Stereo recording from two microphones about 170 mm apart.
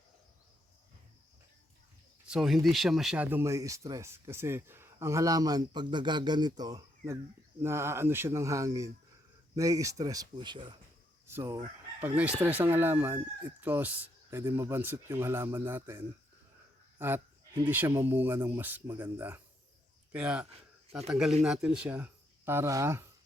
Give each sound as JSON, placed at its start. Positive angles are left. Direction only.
{"t": 2.2, "sound": "speech", "side_deg": -5}
{"t": 11.3, "sound": "speech", "side_deg": -15}